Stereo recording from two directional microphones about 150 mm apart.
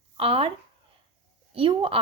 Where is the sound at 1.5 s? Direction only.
35° right (ahead or behind).